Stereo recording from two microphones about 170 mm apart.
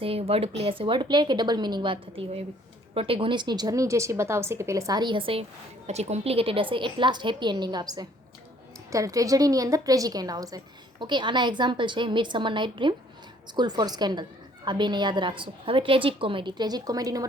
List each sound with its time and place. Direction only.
0.0 s a woman's voice: 35° right (ahead or behind)